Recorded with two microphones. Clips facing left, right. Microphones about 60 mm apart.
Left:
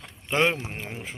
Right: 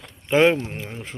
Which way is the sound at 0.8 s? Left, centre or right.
Centre.